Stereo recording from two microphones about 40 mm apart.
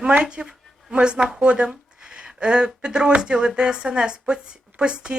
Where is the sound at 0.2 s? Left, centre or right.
Right.